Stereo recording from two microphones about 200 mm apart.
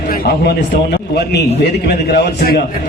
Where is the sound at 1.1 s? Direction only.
55° left (ahead or behind).